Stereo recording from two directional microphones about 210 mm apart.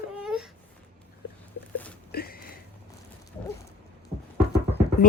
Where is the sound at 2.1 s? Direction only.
45° left (ahead or behind).